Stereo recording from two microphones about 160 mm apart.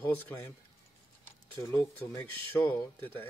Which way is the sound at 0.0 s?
10° left (ahead or behind).